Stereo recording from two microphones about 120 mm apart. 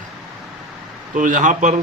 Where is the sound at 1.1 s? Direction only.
90° right.